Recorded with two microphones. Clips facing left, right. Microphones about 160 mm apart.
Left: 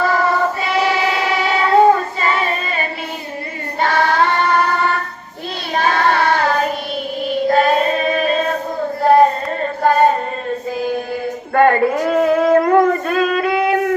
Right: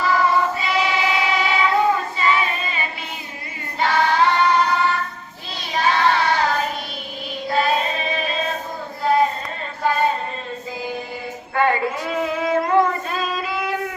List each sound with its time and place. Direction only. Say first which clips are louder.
0.0 s child singing: left 3 dB; 50° left (ahead or behind)
3.8 s choir: left 2 dB; 50° left (ahead or behind)
5.7 s child singing: left 2 dB; 50° left (ahead or behind)
9.0 s a sound: left 7 dB; 50° left (ahead or behind)
11.5 s child singing: left 7 dB; 50° left (ahead or behind)